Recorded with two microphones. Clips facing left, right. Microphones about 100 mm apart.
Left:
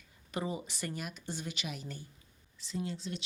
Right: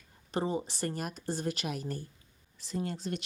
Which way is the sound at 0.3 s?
35° right (ahead or behind).